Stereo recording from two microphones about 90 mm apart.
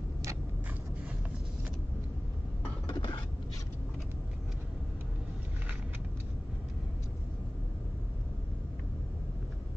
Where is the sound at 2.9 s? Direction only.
60° left (ahead or behind).